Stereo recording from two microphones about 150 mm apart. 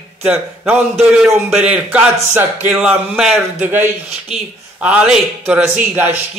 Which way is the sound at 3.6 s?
15° right (ahead or behind).